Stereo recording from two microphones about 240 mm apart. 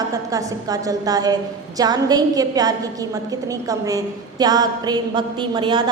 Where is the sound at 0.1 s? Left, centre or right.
Centre.